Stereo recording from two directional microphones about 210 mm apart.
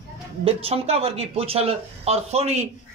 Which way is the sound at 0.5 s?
30° right (ahead or behind).